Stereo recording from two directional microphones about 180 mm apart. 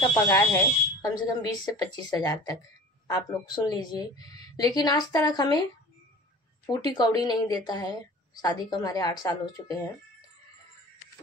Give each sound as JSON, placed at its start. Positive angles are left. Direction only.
{"t": 0.1, "sound": "a woman's voice", "side_deg": 15}
{"t": 6.6, "sound": "a woman's voice", "side_deg": 25}